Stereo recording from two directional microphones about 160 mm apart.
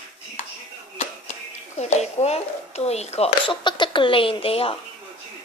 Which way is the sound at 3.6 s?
30° left (ahead or behind).